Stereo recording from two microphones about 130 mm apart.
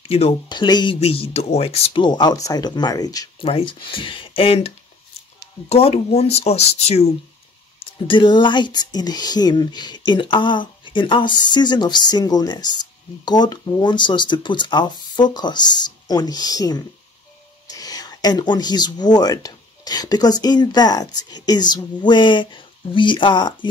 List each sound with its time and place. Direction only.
0.0 s speech: 50° left (ahead or behind)
0.5 s speech: 35° left (ahead or behind)
1.0 s speech: 50° left (ahead or behind)
2.0 s speech: 35° left (ahead or behind)
3.3 s speech: 45° left (ahead or behind)
8.1 s speech: 35° left (ahead or behind)